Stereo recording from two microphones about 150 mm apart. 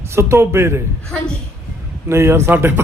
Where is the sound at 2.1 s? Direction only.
15° right (ahead or behind).